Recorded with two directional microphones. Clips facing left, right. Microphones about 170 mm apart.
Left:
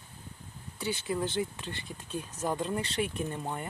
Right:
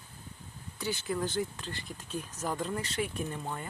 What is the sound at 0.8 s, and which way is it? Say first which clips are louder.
Speech: left 1 dB; 25° left (ahead or behind).